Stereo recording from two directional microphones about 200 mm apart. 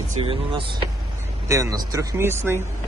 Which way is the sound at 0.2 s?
25° right (ahead or behind).